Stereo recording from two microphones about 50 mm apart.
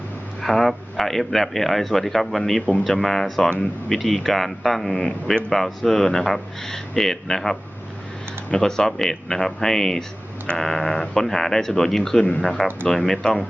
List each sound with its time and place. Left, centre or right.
0.4 s speech: centre
12.2 s speech: left
12.9 s speech: centre